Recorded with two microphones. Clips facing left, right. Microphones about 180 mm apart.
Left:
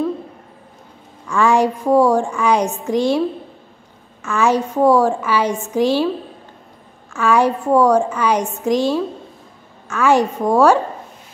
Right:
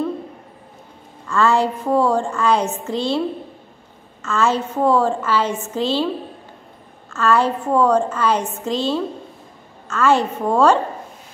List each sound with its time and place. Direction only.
1.2 s a woman's voice: 15° left (ahead or behind)
4.2 s a woman's voice: 15° left (ahead or behind)
7.1 s a woman's voice: 15° left (ahead or behind)